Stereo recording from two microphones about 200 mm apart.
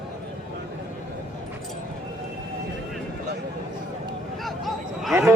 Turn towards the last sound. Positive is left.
turn(degrees=-10)  # may be behind; listen again after turning